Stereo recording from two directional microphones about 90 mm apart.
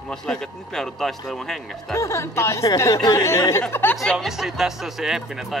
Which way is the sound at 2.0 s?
35° left (ahead or behind).